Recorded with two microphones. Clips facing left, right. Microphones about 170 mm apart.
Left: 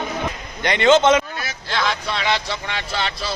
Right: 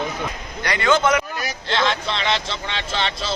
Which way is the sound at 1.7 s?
25° right (ahead or behind).